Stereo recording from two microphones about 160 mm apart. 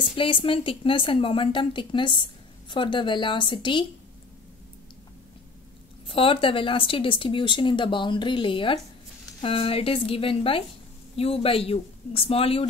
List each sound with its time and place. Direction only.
0.1 s speech: 35° left (ahead or behind)
6.0 s speech: 35° left (ahead or behind)